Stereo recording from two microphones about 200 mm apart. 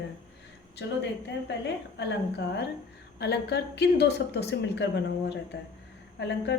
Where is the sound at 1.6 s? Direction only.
60° left (ahead or behind).